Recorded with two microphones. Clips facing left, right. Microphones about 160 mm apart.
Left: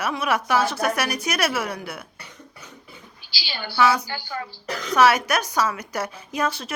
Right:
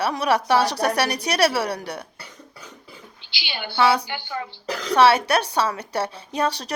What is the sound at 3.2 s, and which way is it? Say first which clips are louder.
Speech: right 1 dB; 20° right (ahead or behind).